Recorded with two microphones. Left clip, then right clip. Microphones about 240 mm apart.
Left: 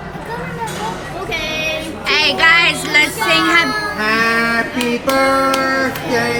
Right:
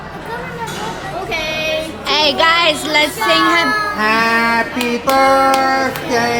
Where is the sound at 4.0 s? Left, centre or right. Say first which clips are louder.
Even; right.